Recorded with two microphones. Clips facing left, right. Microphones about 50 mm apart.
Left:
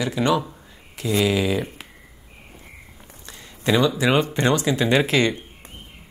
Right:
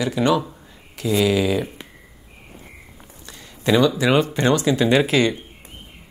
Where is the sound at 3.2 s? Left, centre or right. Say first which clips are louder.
Right 2 dB; left.